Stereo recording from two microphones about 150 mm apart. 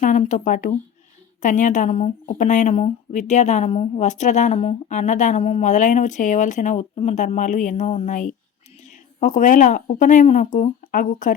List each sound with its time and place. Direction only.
0.0 s a woman's voice: 55° left (ahead or behind)